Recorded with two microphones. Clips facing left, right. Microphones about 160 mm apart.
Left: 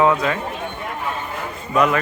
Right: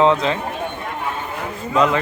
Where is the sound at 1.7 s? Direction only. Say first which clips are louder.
Even; 20° right (ahead or behind).